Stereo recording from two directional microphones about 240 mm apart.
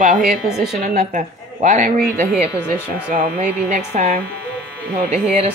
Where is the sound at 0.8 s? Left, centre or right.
Right.